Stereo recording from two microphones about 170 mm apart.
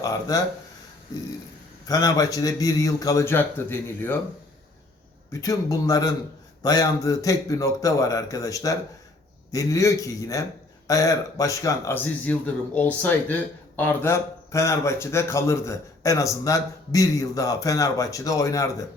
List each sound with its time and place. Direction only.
0.0 s speech: 20° left (ahead or behind)
1.9 s a man's voice: 20° left (ahead or behind)
5.3 s a man's voice: 20° left (ahead or behind)